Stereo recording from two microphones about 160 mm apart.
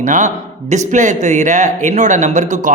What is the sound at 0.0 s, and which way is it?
A man's voice, 55° right (ahead or behind).